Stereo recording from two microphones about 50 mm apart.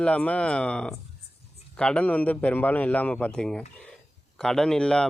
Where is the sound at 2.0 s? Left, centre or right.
Left.